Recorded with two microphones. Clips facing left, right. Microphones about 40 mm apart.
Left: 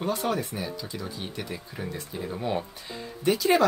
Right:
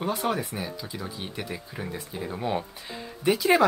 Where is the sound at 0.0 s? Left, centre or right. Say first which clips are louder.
Even; centre.